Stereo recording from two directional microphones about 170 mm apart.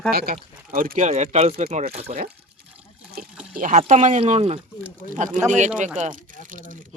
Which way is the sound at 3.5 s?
50° right (ahead or behind).